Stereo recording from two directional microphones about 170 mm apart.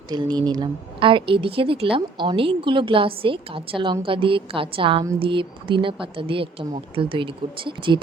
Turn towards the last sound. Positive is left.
turn(degrees=-30)  # may be behind; listen again after turning